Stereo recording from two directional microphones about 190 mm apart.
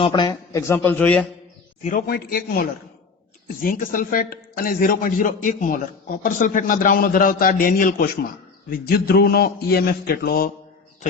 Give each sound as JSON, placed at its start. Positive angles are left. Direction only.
{"t": 0.0, "sound": "a man's voice", "side_deg": 25}
{"t": 1.8, "sound": "a man's voice", "side_deg": 45}